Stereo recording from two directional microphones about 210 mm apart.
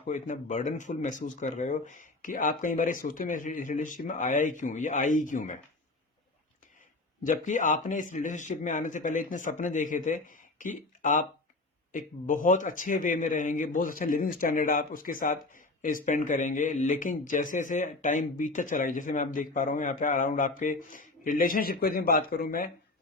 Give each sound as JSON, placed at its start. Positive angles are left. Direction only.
{"t": 0.1, "sound": "speech", "side_deg": 35}
{"t": 7.2, "sound": "speech", "side_deg": 35}